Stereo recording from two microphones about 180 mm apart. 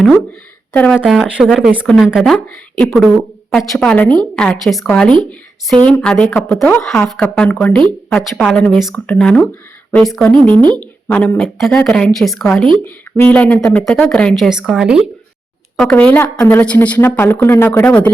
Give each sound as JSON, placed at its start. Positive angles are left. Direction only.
{"t": 0.7, "sound": "a woman's voice", "side_deg": 5}
{"t": 10.4, "sound": "a woman's voice", "side_deg": -25}
{"t": 10.8, "sound": "a woman's voice", "side_deg": 10}